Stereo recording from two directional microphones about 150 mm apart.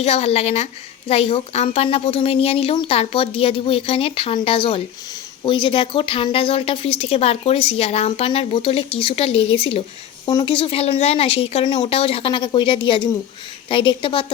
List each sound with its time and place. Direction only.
0.0 s a woman's voice: 45° left (ahead or behind)